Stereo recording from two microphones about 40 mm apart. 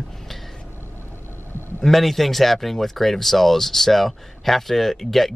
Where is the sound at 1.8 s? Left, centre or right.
Centre.